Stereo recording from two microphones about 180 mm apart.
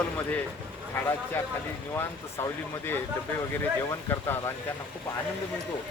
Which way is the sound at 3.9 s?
15° left (ahead or behind).